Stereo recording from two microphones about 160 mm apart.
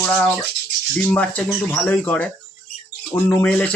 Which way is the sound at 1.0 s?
10° left (ahead or behind).